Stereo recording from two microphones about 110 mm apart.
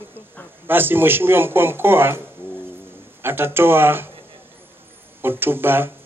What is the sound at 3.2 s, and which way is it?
Speech, 20° right (ahead or behind).